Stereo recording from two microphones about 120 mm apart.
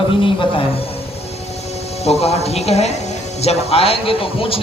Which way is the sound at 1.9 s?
60° left (ahead or behind).